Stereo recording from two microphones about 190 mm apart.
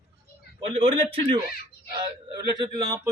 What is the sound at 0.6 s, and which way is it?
A man's voice, 30° right (ahead or behind).